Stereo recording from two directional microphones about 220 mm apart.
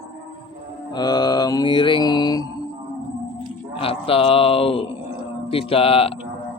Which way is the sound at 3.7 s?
25° left (ahead or behind).